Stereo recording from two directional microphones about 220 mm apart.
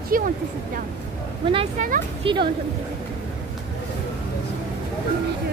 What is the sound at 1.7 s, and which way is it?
Speech, 40° right (ahead or behind).